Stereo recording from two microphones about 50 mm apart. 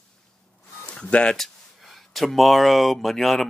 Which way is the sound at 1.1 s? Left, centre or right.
Left.